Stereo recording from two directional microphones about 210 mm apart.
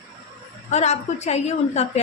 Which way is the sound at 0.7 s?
35° left (ahead or behind).